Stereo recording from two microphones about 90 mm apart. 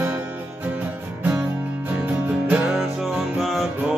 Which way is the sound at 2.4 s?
15° right (ahead or behind).